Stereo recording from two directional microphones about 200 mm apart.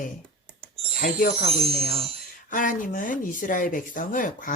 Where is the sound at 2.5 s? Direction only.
40° left (ahead or behind).